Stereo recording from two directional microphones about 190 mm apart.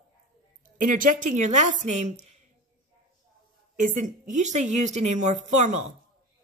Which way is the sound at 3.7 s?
45° right (ahead or behind).